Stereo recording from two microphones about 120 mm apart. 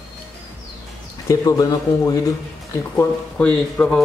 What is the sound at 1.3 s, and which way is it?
Speech, 30° left (ahead or behind).